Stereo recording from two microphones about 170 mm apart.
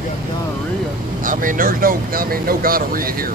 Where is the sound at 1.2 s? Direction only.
50° right (ahead or behind).